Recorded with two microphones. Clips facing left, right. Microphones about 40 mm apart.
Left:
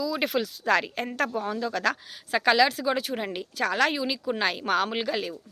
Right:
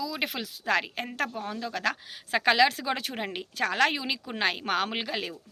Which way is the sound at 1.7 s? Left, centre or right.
Right.